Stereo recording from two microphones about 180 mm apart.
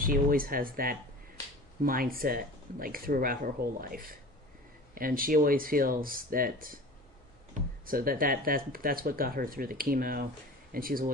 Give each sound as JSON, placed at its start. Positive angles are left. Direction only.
{"t": 0.0, "sound": "speech", "side_deg": -50}
{"t": 7.9, "sound": "speech", "side_deg": -55}